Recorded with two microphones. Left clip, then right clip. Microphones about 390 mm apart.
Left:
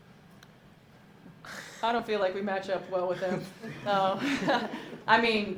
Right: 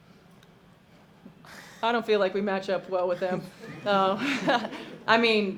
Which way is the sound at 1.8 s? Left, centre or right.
Right.